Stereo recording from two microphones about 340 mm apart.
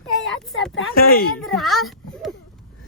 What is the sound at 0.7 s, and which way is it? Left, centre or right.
Speech, left.